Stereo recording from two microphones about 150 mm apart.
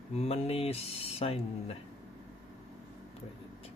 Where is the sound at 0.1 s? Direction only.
45° left (ahead or behind).